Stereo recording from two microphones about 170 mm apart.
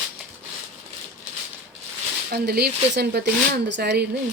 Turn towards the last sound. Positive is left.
turn(degrees=-90)